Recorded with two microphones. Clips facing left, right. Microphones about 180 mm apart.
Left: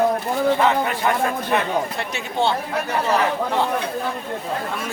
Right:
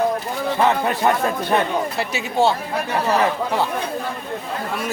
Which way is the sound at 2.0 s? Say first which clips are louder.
Right 4 dB; 5° right (ahead or behind).